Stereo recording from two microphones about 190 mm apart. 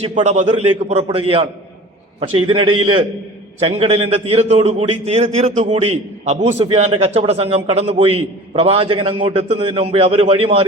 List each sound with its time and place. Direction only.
0.0 s a man's voice: 35° right (ahead or behind)